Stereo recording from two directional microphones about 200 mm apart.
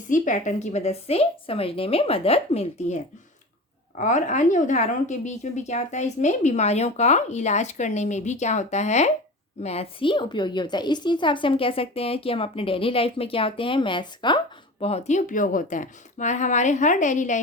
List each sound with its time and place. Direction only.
0.1 s a woman's voice: 40° left (ahead or behind)